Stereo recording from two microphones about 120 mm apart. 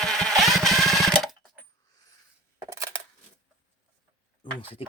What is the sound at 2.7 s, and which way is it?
Coin, 30° right (ahead or behind).